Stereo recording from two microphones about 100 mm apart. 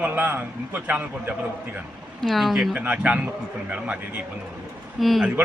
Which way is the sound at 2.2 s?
Centre (ahead or behind).